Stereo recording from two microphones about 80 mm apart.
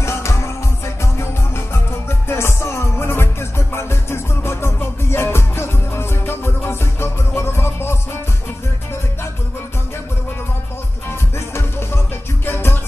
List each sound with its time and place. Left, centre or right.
0.0 s music: left
11.3 s music: left